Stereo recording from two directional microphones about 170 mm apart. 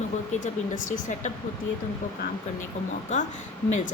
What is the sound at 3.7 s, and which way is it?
Speech, 45° left (ahead or behind).